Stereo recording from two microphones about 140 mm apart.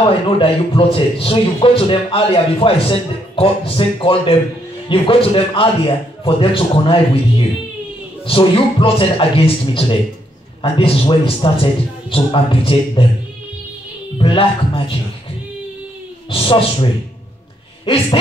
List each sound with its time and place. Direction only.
0.0 s a man's voice: 40° left (ahead or behind)
14.1 s a man's voice: 40° left (ahead or behind)
16.3 s a man's voice: 40° left (ahead or behind)